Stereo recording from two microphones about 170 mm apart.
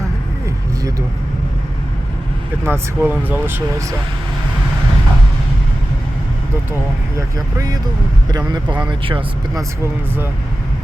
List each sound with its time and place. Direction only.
2.6 s speech: 10° right (ahead or behind)
7.3 s speech: 25° right (ahead or behind)